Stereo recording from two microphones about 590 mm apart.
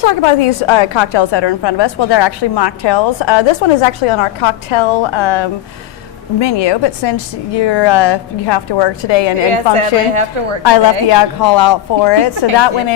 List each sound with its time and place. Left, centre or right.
0.0 s a woman's voice: left
9.7 s a woman's voice: right
10.7 s a woman's voice: left